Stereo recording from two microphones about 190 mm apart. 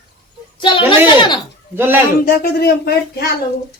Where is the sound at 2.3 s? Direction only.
55° left (ahead or behind).